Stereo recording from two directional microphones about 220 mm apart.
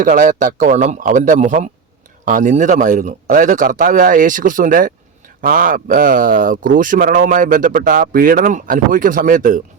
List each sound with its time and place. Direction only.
0.0 s speech: 35° right (ahead or behind)